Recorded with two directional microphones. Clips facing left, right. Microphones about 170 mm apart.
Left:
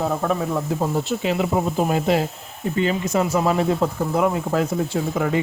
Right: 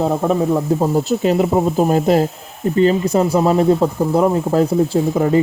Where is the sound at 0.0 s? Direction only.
25° right (ahead or behind).